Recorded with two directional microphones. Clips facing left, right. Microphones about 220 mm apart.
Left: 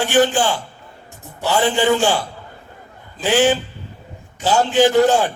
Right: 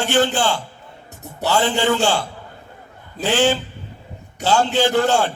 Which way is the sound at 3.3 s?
15° left (ahead or behind).